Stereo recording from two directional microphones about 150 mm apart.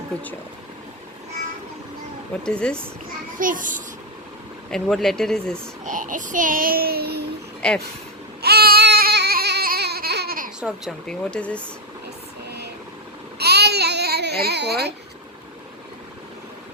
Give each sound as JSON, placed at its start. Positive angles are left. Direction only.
{"t": 2.4, "sound": "speech", "side_deg": 5}
{"t": 3.3, "sound": "a child's voice", "side_deg": -65}
{"t": 4.7, "sound": "speech", "side_deg": 0}
{"t": 5.8, "sound": "child singing", "side_deg": -60}
{"t": 7.6, "sound": "speech", "side_deg": 5}
{"t": 8.4, "sound": "baby cry", "side_deg": -90}
{"t": 10.6, "sound": "speech", "side_deg": -5}
{"t": 11.0, "sound": "speech", "side_deg": 5}
{"t": 12.5, "sound": "vehicle", "side_deg": -90}
{"t": 13.4, "sound": "babbling", "side_deg": -90}